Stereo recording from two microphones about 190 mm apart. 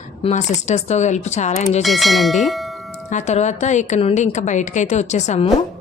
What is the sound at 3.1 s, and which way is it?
Speech, 40° left (ahead or behind).